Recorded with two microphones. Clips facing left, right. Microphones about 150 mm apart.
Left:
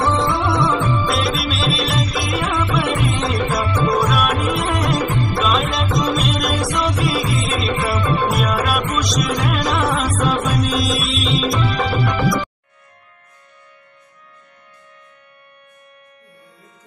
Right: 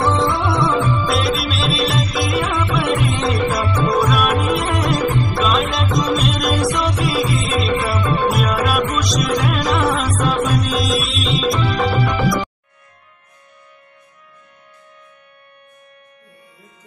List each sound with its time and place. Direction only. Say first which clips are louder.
0.0 s music: right 1 dB; centre (ahead or behind)